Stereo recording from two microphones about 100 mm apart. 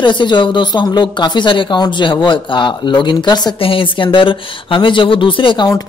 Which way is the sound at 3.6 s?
60° left (ahead or behind).